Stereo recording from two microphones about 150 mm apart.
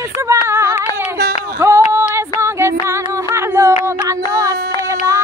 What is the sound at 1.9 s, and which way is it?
Music, 15° right (ahead or behind).